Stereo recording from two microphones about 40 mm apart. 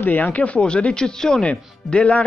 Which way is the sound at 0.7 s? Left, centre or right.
Left.